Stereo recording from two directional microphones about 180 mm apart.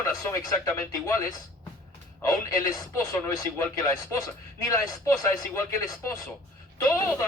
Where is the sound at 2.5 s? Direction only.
20° left (ahead or behind).